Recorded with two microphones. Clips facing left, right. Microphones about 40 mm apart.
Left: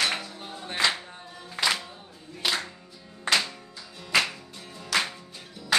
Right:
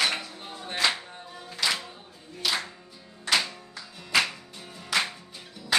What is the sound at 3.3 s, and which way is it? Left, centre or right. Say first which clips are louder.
Music: left 1 dB; left.